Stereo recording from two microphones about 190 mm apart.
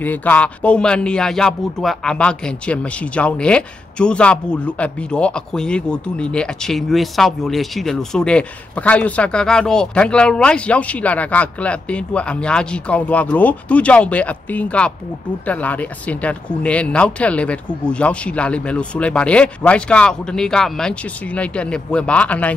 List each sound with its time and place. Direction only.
0.0 s speech: 10° left (ahead or behind)